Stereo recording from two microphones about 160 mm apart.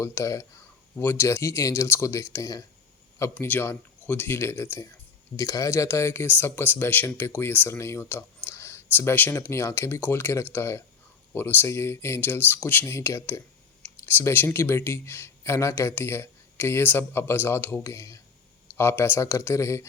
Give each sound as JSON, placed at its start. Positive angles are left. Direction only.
{"t": 0.0, "sound": "speech", "side_deg": 15}